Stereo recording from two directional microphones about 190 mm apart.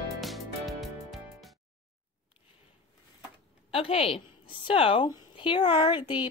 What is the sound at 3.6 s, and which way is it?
A woman's voice, 30° left (ahead or behind).